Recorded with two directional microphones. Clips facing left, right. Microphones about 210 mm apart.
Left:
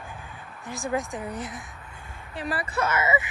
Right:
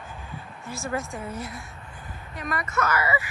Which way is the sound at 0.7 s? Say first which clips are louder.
Left 2 dB; 15° left (ahead or behind).